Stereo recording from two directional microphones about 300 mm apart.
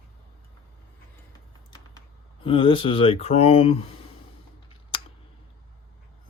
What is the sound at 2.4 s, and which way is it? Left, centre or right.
Speech, centre.